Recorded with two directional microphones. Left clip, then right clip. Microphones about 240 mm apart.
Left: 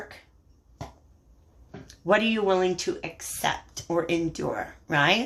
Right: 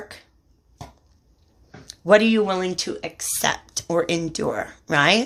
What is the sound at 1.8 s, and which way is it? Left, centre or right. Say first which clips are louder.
Speech: right 7 dB; right.